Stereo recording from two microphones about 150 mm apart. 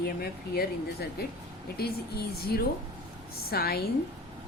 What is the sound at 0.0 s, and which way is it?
Speech, 90° left.